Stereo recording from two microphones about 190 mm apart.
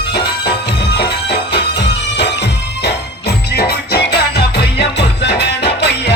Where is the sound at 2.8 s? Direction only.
60° left (ahead or behind).